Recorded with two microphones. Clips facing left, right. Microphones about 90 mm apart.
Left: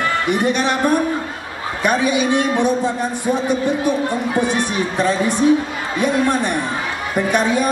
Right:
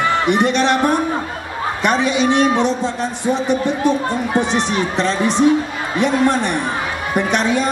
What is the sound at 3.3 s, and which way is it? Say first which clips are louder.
A man's voice: right 1 dB; 20° right (ahead or behind).